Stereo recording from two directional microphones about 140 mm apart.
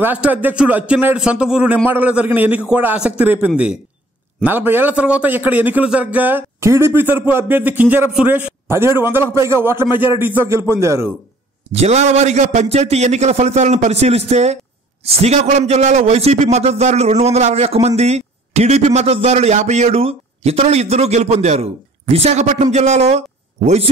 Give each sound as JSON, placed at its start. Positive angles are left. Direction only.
{"t": 0.0, "sound": "a man's voice", "side_deg": -10}
{"t": 11.7, "sound": "a man's voice", "side_deg": -50}